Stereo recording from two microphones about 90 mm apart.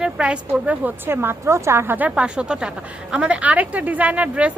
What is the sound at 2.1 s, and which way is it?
Speech, 10° right (ahead or behind).